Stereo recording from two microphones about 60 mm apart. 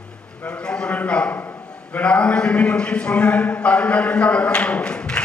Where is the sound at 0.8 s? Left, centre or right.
Left.